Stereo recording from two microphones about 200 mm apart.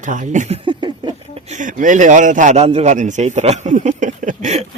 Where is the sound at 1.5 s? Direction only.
40° right (ahead or behind).